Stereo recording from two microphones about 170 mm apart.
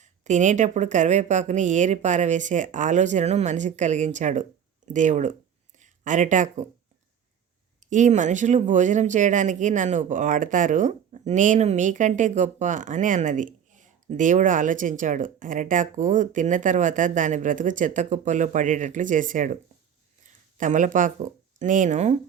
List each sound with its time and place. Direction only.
0.0 s speech: 45° right (ahead or behind)
7.8 s speech: 45° right (ahead or behind)
20.6 s speech: 45° right (ahead or behind)